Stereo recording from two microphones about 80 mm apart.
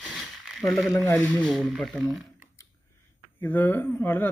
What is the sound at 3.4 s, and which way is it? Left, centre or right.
Speech, left.